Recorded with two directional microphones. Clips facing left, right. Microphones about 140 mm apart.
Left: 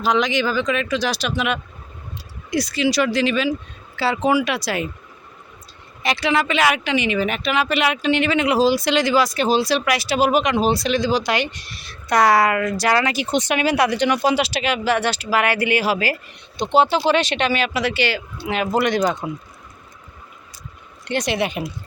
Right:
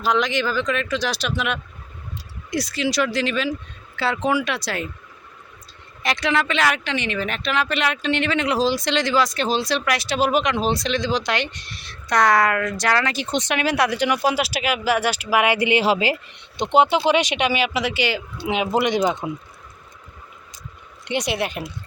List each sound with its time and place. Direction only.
0.0 s speech: centre (ahead or behind)
6.0 s speech: centre (ahead or behind); by 19.2 s 20° right (ahead or behind)
21.1 s speech: 15° right (ahead or behind)
21.3 s speech: centre (ahead or behind)